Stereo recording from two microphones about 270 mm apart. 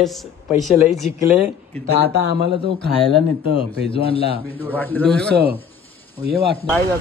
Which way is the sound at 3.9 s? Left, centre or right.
Left.